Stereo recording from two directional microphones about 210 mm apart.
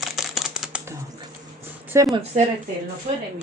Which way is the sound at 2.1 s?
30° right (ahead or behind).